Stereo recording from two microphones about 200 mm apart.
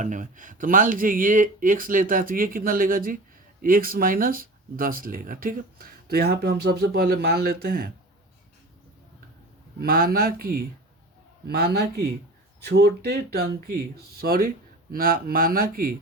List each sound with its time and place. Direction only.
0.0 s speech: 40° right (ahead or behind)
9.8 s speech: 45° right (ahead or behind)